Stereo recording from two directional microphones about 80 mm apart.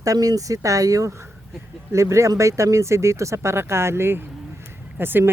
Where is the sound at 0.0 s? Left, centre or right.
Right.